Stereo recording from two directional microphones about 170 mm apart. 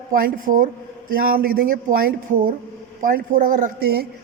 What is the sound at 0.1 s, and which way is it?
A woman's voice, 55° right (ahead or behind).